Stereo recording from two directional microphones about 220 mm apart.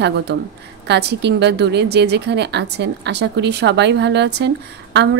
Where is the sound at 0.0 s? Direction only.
50° right (ahead or behind).